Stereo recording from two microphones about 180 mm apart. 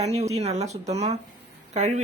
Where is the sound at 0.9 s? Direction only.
35° right (ahead or behind).